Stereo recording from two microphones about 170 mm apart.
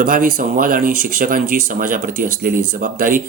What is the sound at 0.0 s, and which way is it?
Speech, 60° right (ahead or behind).